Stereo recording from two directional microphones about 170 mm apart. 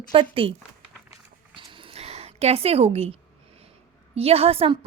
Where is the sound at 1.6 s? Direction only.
30° right (ahead or behind).